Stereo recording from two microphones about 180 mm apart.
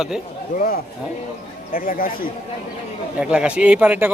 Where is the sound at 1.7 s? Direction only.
50° left (ahead or behind).